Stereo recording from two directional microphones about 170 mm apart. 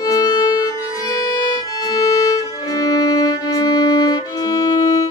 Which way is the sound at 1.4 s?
25° left (ahead or behind).